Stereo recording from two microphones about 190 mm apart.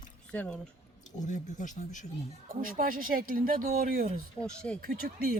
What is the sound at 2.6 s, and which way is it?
Speech, 45° right (ahead or behind).